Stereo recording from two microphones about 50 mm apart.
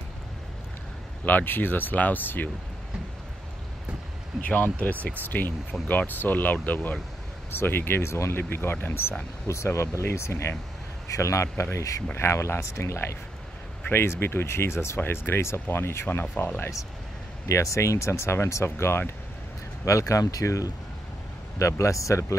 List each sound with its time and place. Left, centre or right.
1.2 s speech: left
4.3 s a sound: centre
4.7 s speech: left
8.1 s speech: left
8.4 s speech: left
9.0 s speech: left
11.1 s speech: left
11.4 s speech: left
13.8 s speech: left
15.0 s speech: left
17.5 s speech: left
19.8 s speech: left